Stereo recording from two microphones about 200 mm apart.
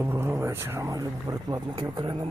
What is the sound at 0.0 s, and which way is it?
Speech, 10° right (ahead or behind).